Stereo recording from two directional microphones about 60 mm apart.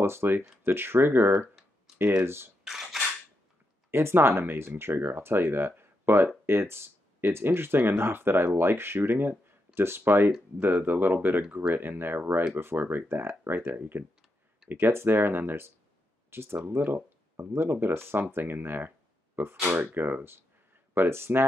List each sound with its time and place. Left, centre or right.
0.0 s speech: right
2.6 s cutlery: centre
3.9 s speech: right